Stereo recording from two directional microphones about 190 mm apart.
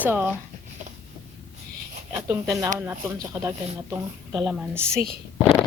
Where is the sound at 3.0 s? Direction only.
20° right (ahead or behind).